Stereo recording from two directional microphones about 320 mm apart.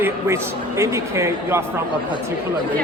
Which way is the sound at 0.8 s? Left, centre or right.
Centre.